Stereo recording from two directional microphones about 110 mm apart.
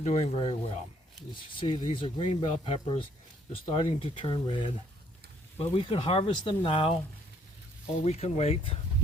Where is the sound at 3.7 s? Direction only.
50° left (ahead or behind).